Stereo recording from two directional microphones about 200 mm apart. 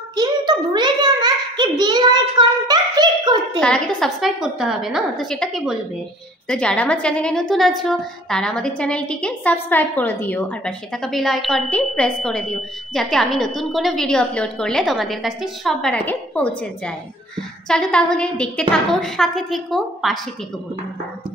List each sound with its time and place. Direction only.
0.1 s a child's voice: 20° right (ahead or behind)
3.6 s a woman's voice: 5° left (ahead or behind)